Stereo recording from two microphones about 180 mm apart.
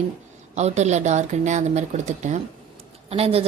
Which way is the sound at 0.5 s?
40° right (ahead or behind).